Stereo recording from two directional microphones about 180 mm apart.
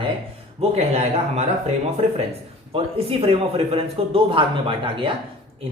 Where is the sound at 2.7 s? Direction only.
30° right (ahead or behind).